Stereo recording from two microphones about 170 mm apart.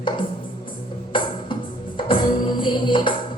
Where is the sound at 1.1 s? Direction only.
30° left (ahead or behind).